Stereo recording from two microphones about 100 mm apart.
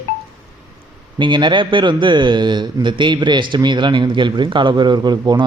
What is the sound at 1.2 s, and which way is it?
A man's voice, 50° right (ahead or behind).